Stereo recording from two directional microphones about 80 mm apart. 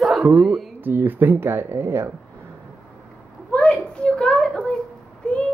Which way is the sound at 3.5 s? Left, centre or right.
Centre.